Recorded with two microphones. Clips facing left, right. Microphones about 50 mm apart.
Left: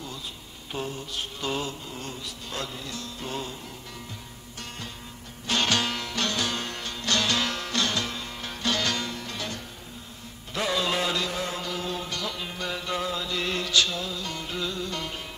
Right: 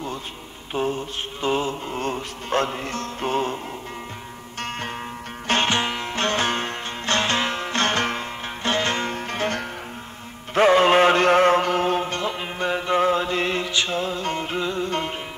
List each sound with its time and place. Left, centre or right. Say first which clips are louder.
0.7 s mantra: right 8 dB; right
5.5 s music: right 4 dB; right
10.5 s chant: right 12 dB; right
13.9 s music: right 8 dB; right